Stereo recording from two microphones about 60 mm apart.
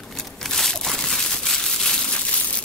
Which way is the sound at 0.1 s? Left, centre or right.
Centre.